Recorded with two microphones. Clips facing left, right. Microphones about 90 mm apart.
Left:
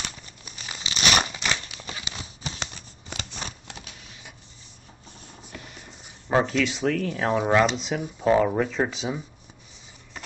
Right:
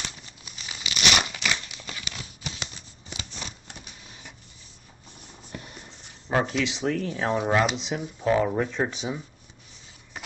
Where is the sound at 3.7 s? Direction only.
90° left.